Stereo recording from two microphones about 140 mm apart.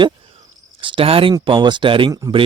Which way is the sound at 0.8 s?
40° right (ahead or behind).